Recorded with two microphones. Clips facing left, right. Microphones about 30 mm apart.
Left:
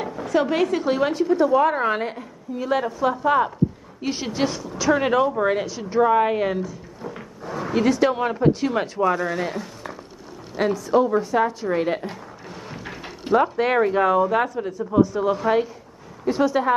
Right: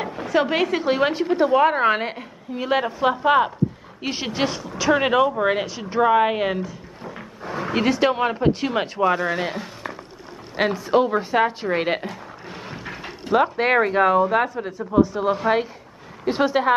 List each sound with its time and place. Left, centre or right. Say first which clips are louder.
0.1 s a woman's voice: even; right
4.0 s speech: even; centre
10.5 s a woman's voice: even; right
12.4 s a sound: right 2 dB; right
13.4 s a woman's voice: right 2 dB; right